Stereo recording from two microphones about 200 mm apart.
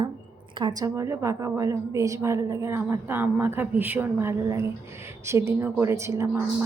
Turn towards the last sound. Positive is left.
turn(degrees=-15)  # may be behind; listen again after turning